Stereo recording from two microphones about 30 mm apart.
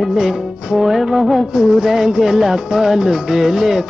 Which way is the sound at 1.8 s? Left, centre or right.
Centre.